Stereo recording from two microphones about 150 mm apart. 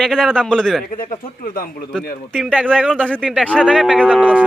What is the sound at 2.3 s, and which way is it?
Speech, 5° left (ahead or behind).